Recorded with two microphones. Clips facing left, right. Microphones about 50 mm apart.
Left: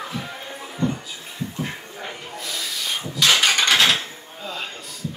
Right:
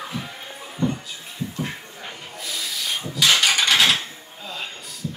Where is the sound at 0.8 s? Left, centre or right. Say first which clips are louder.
Even; centre.